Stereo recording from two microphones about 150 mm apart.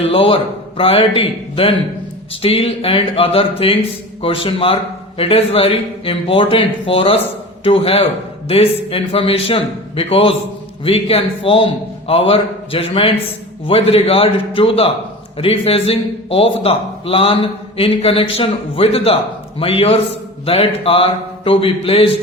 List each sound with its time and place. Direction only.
0.0 s a man's voice: 40° left (ahead or behind)